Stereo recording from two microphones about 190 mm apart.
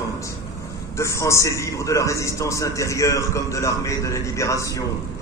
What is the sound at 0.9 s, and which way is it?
A man's voice, 15° left (ahead or behind).